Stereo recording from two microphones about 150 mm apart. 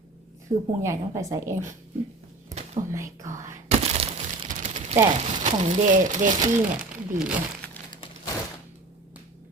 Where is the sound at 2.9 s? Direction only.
20° right (ahead or behind).